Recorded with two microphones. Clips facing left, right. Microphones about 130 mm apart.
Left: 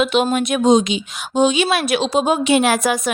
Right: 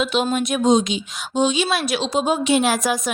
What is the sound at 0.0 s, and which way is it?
Speech, 65° left (ahead or behind).